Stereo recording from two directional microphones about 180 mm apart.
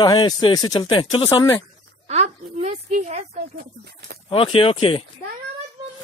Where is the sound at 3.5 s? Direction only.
60° right (ahead or behind).